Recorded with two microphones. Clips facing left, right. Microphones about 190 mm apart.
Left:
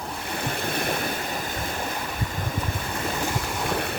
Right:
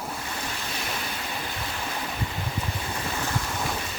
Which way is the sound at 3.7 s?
60° left (ahead or behind).